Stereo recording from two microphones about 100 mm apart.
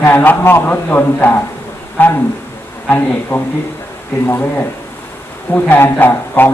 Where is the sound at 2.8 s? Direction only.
20° left (ahead or behind).